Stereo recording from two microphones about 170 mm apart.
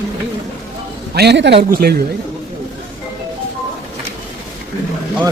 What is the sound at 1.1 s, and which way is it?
Speech, 80° right.